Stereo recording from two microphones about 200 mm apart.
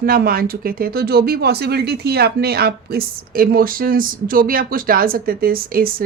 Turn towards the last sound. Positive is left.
turn(degrees=-45)  # may be behind; listen again after turning